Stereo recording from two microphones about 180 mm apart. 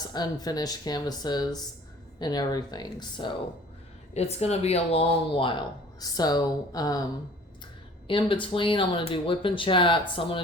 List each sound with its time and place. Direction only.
0.0 s speech: 20° left (ahead or behind)
4.1 s speech: 35° left (ahead or behind); by 7.0 s 20° left (ahead or behind)
8.0 s speech: 30° left (ahead or behind)